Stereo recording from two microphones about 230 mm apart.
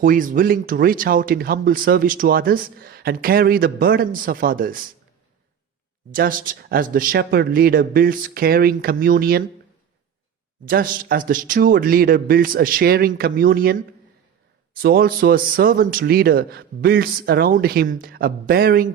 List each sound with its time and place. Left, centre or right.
0.0 s speech: right
6.1 s speech: right
10.7 s speech: right